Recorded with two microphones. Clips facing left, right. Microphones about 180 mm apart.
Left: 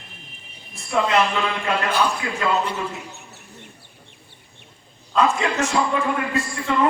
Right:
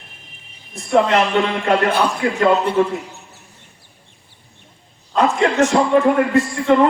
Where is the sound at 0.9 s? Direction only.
45° right (ahead or behind).